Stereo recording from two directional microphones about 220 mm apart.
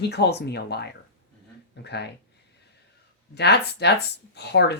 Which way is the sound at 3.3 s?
50° left (ahead or behind).